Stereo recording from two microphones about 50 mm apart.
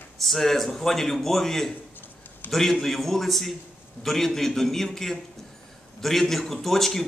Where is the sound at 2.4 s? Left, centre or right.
Left.